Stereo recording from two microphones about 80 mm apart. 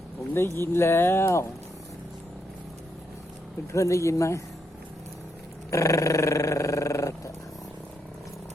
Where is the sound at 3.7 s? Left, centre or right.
Left.